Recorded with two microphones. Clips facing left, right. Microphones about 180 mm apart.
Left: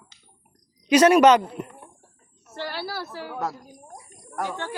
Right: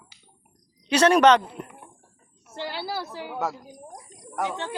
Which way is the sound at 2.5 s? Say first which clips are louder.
Even; 15° right (ahead or behind).